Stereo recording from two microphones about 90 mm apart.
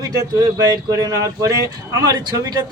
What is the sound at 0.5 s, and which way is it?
A man's voice, 40° right (ahead or behind).